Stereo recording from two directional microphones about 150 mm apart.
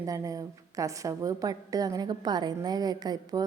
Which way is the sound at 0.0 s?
20° right (ahead or behind).